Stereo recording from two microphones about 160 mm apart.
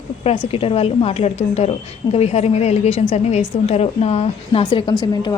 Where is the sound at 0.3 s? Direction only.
35° left (ahead or behind).